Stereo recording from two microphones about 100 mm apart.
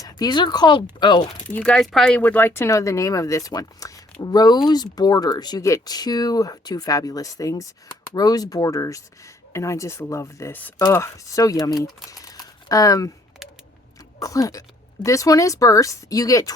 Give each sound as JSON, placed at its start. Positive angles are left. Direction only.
{"t": 0.0, "sound": "speech", "side_deg": 45}
{"t": 1.5, "sound": "speech", "side_deg": 10}
{"t": 2.2, "sound": "speech", "side_deg": 20}
{"t": 14.2, "sound": "speech", "side_deg": 35}